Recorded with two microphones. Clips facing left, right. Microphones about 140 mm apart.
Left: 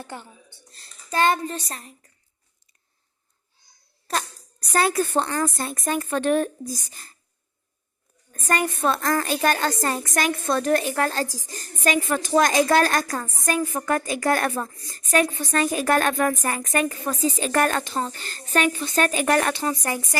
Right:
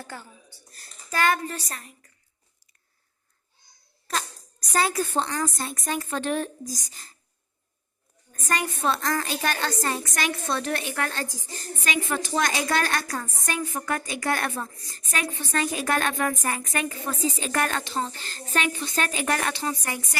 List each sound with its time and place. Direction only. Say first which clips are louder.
0.0 s speech: left 3 dB; 20° left (ahead or behind)
4.7 s a woman's voice: left 3 dB; 55° left (ahead or behind)
8.3 s a woman's voice: left 4 dB; 50° left (ahead or behind)